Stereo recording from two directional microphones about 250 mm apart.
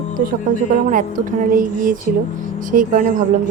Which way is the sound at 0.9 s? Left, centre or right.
Right.